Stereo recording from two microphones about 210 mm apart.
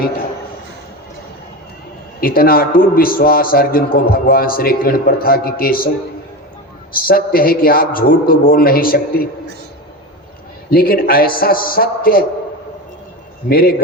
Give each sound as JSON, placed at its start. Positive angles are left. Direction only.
{"t": 2.2, "sound": "a man's voice", "side_deg": 45}
{"t": 6.9, "sound": "a man's voice", "side_deg": 45}
{"t": 10.7, "sound": "a man's voice", "side_deg": 45}
{"t": 13.5, "sound": "a man's voice", "side_deg": 45}